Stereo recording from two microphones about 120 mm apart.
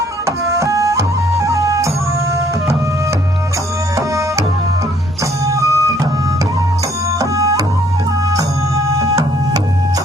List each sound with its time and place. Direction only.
0.3 s music: 25° right (ahead or behind)
3.9 s music: 25° right (ahead or behind)
5.5 s music: 30° right (ahead or behind)
7.2 s music: 30° right (ahead or behind)